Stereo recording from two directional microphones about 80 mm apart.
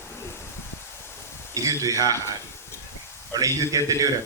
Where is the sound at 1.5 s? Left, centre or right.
Right.